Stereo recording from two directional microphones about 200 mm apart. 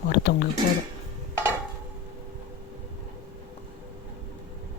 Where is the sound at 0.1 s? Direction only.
50° left (ahead or behind).